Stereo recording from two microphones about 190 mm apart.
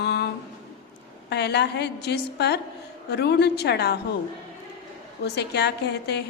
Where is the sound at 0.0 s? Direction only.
60° left (ahead or behind).